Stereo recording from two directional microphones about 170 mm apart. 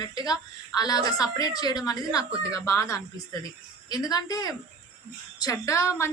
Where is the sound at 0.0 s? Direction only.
25° left (ahead or behind).